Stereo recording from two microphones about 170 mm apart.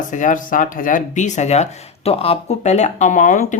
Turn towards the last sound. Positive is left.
turn(degrees=45)  # may be behind; listen again after turning